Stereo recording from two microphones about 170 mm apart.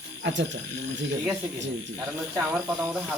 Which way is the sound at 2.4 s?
5° right (ahead or behind).